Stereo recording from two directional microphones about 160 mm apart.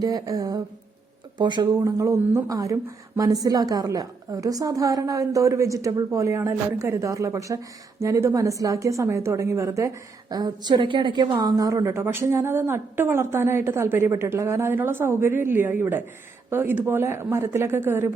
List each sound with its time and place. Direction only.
0.0 s speech: 25° right (ahead or behind)